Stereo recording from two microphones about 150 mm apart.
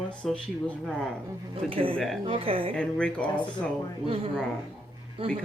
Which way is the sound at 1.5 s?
35° right (ahead or behind).